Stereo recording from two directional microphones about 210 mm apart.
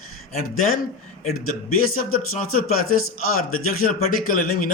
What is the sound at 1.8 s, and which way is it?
A man's voice, 80° left.